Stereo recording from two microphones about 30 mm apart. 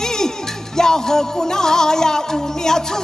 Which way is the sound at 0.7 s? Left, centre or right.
Left.